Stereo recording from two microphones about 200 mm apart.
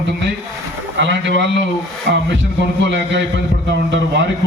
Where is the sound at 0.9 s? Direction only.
60° right (ahead or behind).